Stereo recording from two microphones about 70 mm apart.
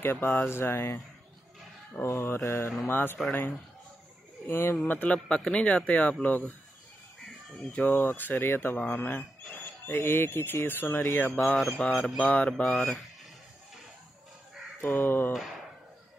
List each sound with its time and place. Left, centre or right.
0.0 s speech: left
2.0 s mantra: left
2.9 s speech: left
4.5 s speech: left
4.8 s speech: left
7.6 s speech: left
11.5 s a sound: centre
11.8 s speech: centre
12.2 s speech: left
12.6 s speech: centre
14.8 s speech: left
15.3 s speech: centre